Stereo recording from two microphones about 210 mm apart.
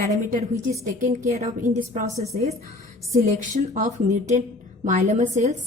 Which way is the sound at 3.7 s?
35° right (ahead or behind).